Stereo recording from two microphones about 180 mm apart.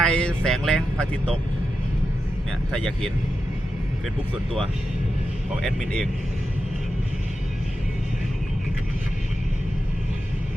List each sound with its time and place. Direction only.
0.0 s speech: 5° left (ahead or behind)
2.7 s speech: 5° left (ahead or behind)
5.6 s speech: 5° left (ahead or behind)